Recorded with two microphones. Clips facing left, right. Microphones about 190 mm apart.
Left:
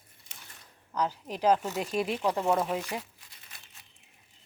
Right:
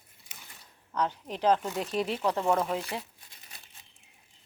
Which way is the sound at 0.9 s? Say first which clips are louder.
Even; 10° left (ahead or behind).